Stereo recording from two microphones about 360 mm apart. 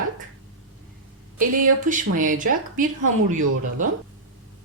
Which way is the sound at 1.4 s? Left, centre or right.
Right.